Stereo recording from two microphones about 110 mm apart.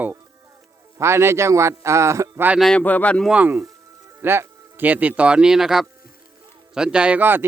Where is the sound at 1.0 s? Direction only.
25° right (ahead or behind).